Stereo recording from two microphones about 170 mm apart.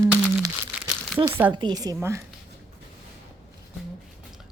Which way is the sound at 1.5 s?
25° right (ahead or behind).